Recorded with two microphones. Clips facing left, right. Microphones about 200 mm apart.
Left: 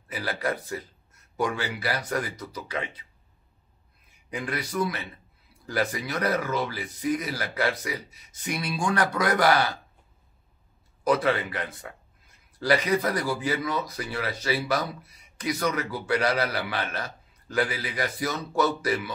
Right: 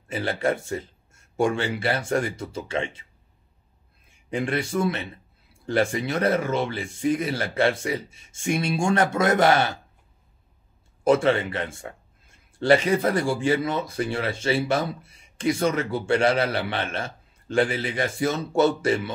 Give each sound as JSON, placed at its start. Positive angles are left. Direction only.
{"t": 0.1, "sound": "a man's voice", "side_deg": -25}
{"t": 4.1, "sound": "a man's voice", "side_deg": -30}
{"t": 11.1, "sound": "a man's voice", "side_deg": -25}